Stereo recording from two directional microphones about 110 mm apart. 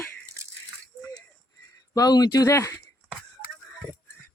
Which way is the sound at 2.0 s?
35° left (ahead or behind).